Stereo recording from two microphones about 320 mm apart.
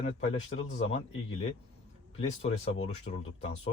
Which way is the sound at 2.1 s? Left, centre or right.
Centre.